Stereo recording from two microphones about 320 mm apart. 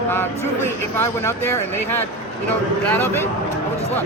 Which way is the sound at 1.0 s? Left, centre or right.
Centre.